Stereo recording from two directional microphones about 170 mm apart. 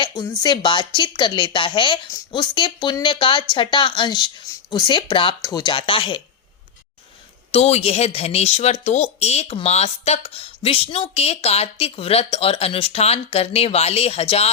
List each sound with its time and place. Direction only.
0.0 s speech: 25° left (ahead or behind)
7.5 s speech: 40° left (ahead or behind)